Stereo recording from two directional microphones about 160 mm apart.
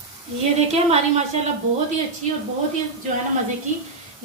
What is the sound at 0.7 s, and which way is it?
Speech, 40° right (ahead or behind).